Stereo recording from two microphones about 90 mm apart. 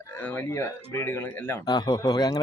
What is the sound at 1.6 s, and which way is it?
Speech, 50° left (ahead or behind).